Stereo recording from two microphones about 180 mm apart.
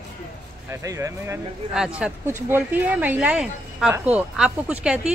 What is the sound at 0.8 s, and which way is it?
Speech, 15° right (ahead or behind).